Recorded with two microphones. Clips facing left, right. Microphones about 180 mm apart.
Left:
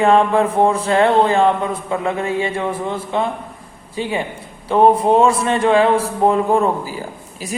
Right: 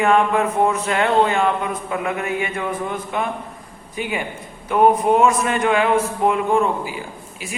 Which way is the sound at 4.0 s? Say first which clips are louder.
Left 4 dB; 30° left (ahead or behind).